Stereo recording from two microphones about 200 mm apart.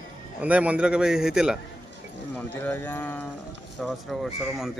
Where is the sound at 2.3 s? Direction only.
10° left (ahead or behind).